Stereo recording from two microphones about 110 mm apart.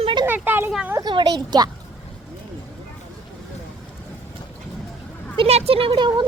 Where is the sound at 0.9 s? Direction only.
40° right (ahead or behind).